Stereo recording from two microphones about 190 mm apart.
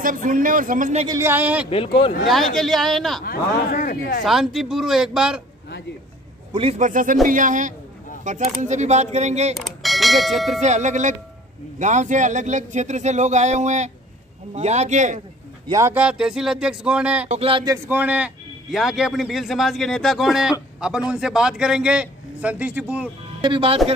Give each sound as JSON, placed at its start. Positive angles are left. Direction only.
{"t": 0.0, "sound": "a man's voice", "side_deg": -45}
{"t": 1.0, "sound": "speech", "side_deg": -15}
{"t": 1.7, "sound": "speech", "side_deg": 30}
{"t": 2.2, "sound": "a man's voice", "side_deg": 0}
{"t": 3.3, "sound": "speech", "side_deg": 50}
{"t": 4.2, "sound": "a man's voice", "side_deg": 0}
{"t": 6.5, "sound": "a man's voice", "side_deg": -30}
{"t": 9.8, "sound": "speech", "side_deg": 0}
{"t": 10.6, "sound": "speech", "side_deg": -40}
{"t": 15.7, "sound": "a man's voice", "side_deg": -10}
{"t": 17.3, "sound": "speech", "side_deg": -30}
{"t": 17.8, "sound": "a man's voice", "side_deg": -10}
{"t": 23.4, "sound": "speech", "side_deg": -25}